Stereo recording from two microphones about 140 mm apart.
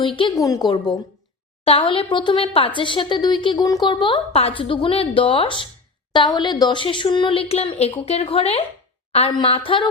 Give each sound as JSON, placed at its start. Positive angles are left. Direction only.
{"t": 0.0, "sound": "a woman's voice", "side_deg": 35}
{"t": 0.3, "sound": "a woman's voice", "side_deg": 25}
{"t": 1.6, "sound": "a woman's voice", "side_deg": 40}
{"t": 3.9, "sound": "a woman's voice", "side_deg": 40}